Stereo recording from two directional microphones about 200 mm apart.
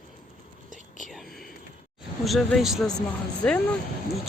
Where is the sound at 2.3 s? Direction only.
Centre (ahead or behind).